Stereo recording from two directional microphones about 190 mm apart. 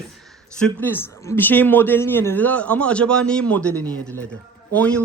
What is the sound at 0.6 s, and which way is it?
Speech, 10° left (ahead or behind).